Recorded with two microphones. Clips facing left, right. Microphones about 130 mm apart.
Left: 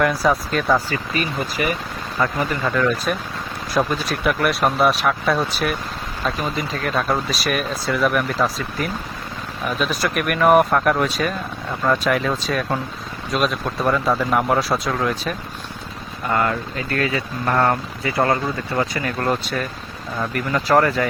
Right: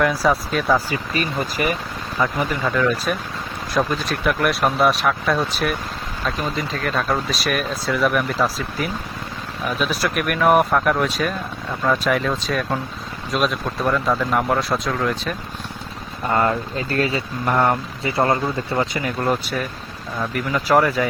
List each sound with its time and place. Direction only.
0.0 s speech: centre (ahead or behind)
1.1 s speech: 40° right (ahead or behind)
2.1 s speech: 5° right (ahead or behind)
16.3 s speech: 25° right (ahead or behind)
17.4 s speech: 10° right (ahead or behind)
18.3 s speech: 25° right (ahead or behind)
19.0 s speech: 10° right (ahead or behind)